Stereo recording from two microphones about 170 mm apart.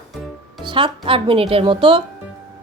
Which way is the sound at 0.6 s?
30° right (ahead or behind).